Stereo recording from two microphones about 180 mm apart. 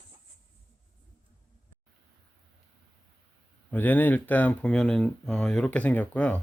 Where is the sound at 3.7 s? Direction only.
10° left (ahead or behind).